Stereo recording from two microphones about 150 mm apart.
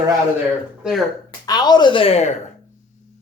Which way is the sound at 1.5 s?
30° left (ahead or behind).